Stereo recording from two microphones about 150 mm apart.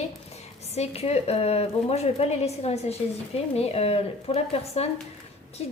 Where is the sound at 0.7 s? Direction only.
45° left (ahead or behind).